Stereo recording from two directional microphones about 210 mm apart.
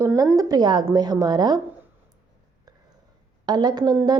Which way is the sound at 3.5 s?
20° right (ahead or behind).